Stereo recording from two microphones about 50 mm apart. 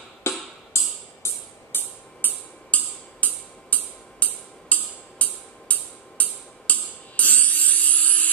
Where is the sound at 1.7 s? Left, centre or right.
Left.